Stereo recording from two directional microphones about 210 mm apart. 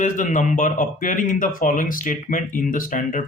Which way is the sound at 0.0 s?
35° left (ahead or behind).